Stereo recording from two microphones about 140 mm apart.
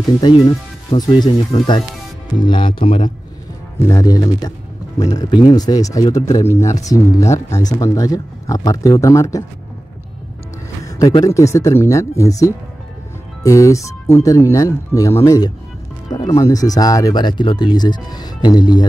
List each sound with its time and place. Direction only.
0.2 s speech: 30° left (ahead or behind)
3.8 s speech: 25° left (ahead or behind)
11.2 s speech: 20° left (ahead or behind)